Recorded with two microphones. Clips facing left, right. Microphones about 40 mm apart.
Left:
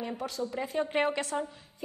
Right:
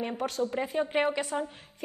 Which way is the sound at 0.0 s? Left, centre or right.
Right.